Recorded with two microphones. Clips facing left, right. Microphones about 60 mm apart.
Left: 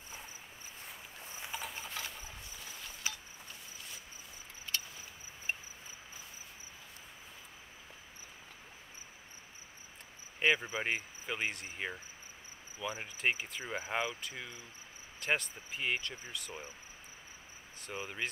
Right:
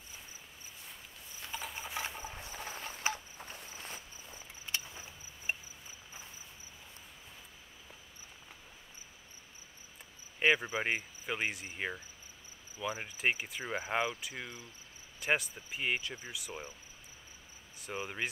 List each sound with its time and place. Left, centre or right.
1.5 s clip-clop: centre
2.0 s a sound: right
4.6 s vehicle: centre
5.5 s a sound: centre
10.4 s speech: centre
17.9 s speech: centre